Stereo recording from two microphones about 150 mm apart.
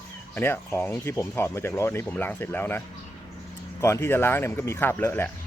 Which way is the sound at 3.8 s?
15° left (ahead or behind).